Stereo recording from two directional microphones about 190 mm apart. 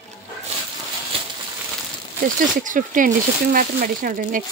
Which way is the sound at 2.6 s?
45° right (ahead or behind).